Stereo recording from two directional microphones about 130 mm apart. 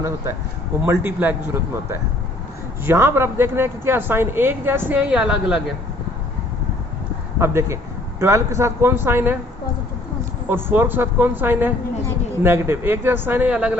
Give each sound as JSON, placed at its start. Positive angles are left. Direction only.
{"t": 0.9, "sound": "speech", "side_deg": -15}
{"t": 2.8, "sound": "speech", "side_deg": -20}
{"t": 7.3, "sound": "speech", "side_deg": -20}
{"t": 10.5, "sound": "speech", "side_deg": -15}